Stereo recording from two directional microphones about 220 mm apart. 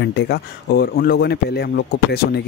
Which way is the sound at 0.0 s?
50° left (ahead or behind).